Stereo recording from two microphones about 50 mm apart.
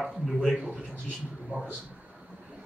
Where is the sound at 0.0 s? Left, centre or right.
Centre.